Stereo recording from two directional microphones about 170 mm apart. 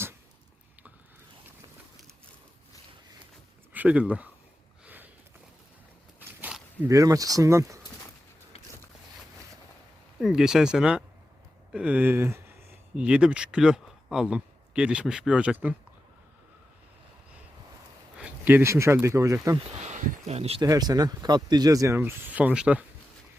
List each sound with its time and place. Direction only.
3.7 s speech: 10° right (ahead or behind)
6.1 s a sound: 10° right (ahead or behind)
8.5 s biting: 40° left (ahead or behind)
10.2 s speech: 5° right (ahead or behind)
18.2 s speech: 10° right (ahead or behind)
19.8 s speech: 40° right (ahead or behind)
20.6 s speech: 25° right (ahead or behind); by 22.8 s 5° right (ahead or behind)